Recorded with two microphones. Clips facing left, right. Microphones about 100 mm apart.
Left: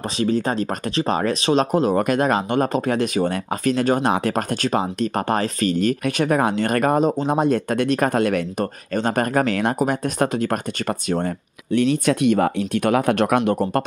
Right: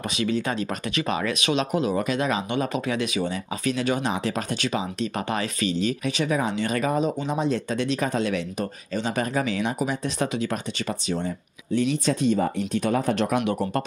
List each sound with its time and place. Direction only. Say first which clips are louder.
0.2 s speech: left 5 dB; 40° left (ahead or behind); by 13.4 s 60° left (ahead or behind)
13.4 s speech: left 5 dB; 45° left (ahead or behind)